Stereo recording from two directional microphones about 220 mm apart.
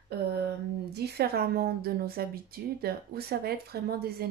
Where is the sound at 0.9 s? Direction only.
45° right (ahead or behind).